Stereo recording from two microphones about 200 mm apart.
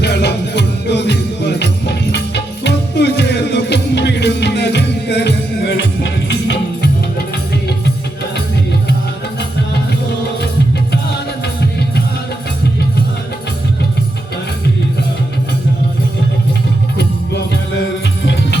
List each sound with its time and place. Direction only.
0.0 s music: 55° left (ahead or behind)